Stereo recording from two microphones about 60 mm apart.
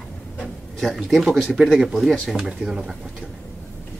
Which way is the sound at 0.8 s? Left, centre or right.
Centre.